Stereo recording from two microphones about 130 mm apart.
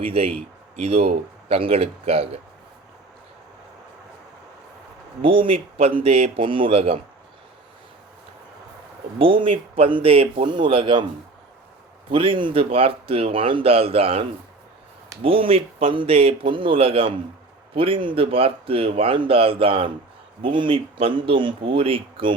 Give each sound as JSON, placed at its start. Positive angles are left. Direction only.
{"t": 0.0, "sound": "speech", "side_deg": -45}
{"t": 5.2, "sound": "speech", "side_deg": -45}
{"t": 9.1, "sound": "speech", "side_deg": -45}
{"t": 12.0, "sound": "speech", "side_deg": -40}